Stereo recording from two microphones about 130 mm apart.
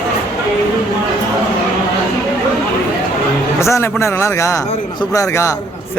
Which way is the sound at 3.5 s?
20° left (ahead or behind).